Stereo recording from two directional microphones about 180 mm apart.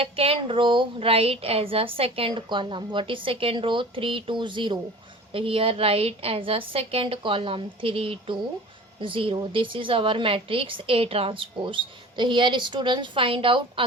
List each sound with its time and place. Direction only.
0.0 s a woman's voice: 30° right (ahead or behind)